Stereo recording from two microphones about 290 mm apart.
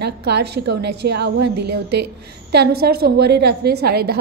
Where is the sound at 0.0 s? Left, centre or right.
Right.